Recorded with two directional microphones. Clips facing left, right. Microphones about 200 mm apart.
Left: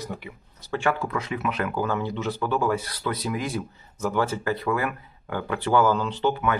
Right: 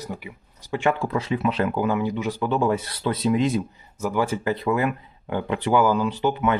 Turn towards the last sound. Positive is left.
turn(degrees=-10)  # may be behind; listen again after turning